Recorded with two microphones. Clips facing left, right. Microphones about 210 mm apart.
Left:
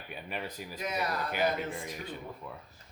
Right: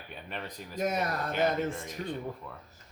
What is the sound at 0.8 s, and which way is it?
Speech, 45° right (ahead or behind).